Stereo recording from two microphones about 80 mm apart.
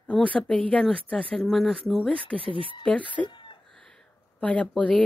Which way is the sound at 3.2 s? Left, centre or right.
Left.